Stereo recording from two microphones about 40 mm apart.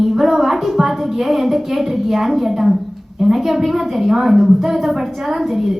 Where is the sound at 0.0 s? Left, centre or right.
Centre.